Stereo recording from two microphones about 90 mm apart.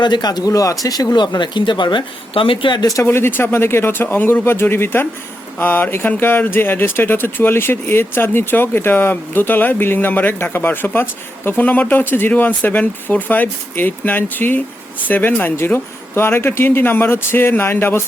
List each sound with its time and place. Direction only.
0.0 s speech: 50° left (ahead or behind)
3.0 s speech: 25° left (ahead or behind)